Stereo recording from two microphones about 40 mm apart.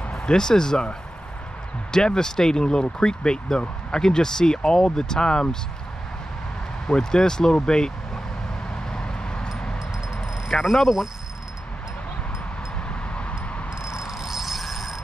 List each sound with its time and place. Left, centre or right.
0.1 s speech: centre
6.9 s speech: centre
8.9 s vehicle: left
10.6 s speech: centre
13.1 s a sound: left
14.0 s a sound: centre